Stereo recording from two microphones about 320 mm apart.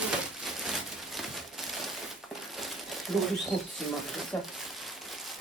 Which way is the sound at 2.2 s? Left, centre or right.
Centre.